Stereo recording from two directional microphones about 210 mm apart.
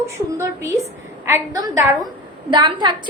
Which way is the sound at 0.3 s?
15° right (ahead or behind).